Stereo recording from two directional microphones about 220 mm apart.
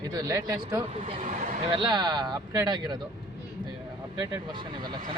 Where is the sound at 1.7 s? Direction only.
20° right (ahead or behind).